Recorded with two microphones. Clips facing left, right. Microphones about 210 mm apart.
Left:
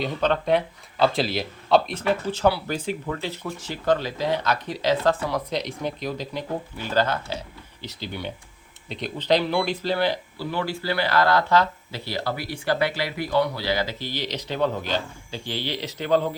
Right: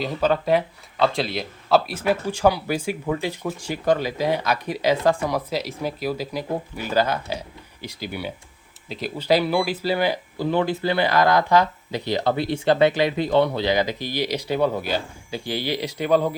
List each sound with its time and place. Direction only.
0.0 s speech: 5° right (ahead or behind)